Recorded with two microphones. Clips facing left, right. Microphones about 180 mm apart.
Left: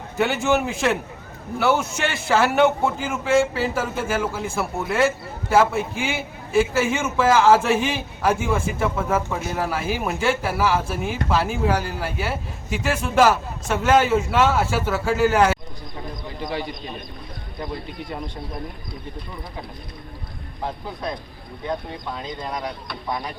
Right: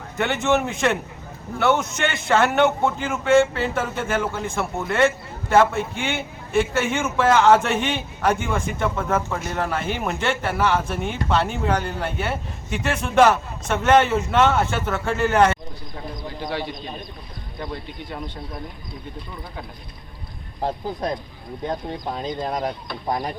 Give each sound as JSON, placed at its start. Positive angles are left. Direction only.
{"t": 0.4, "sound": "a man's voice", "side_deg": 5}
{"t": 20.6, "sound": "speech", "side_deg": -35}